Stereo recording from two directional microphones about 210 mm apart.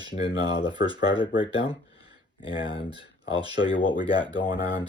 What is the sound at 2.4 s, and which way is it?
Speech, 25° left (ahead or behind).